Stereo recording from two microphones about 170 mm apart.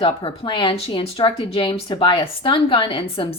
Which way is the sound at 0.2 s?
30° left (ahead or behind).